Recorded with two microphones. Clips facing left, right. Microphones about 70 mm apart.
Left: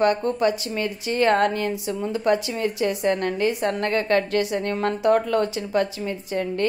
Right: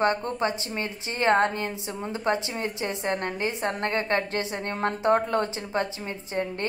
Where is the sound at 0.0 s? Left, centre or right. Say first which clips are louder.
Left 5 dB; right.